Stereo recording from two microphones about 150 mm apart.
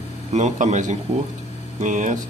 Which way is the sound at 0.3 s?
50° right (ahead or behind).